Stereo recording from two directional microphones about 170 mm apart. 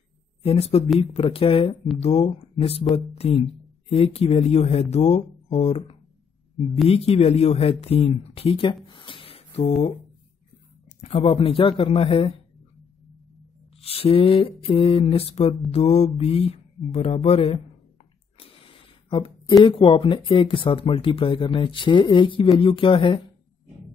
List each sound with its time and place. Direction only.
0.4 s speech: 35° left (ahead or behind)
8.8 s a sound: 30° left (ahead or behind)
10.9 s speech: 40° left (ahead or behind)
13.7 s speech: 35° left (ahead or behind)
18.4 s a sound: 30° left (ahead or behind)
19.6 s speech: 30° left (ahead or behind)